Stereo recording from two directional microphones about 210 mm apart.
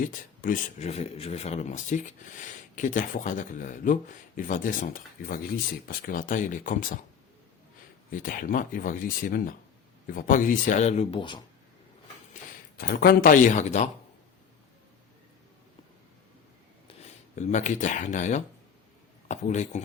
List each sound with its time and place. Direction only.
0.0 s speech: 40° left (ahead or behind)
8.1 s speech: 40° left (ahead or behind)
12.3 s speech: 45° left (ahead or behind)
17.3 s speech: 35° left (ahead or behind)